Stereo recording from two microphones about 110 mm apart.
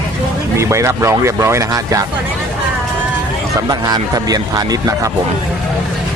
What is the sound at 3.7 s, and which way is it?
Speech, 35° right (ahead or behind).